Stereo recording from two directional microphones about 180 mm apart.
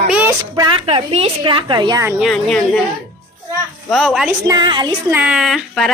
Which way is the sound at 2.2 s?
Centre (ahead or behind).